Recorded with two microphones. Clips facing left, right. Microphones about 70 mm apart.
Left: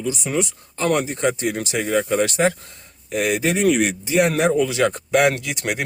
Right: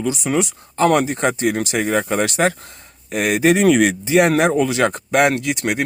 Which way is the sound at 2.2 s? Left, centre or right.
Right.